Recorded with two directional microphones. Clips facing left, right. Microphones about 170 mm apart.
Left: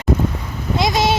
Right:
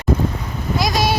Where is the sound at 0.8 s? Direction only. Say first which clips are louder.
Left 2 dB; 25° left (ahead or behind).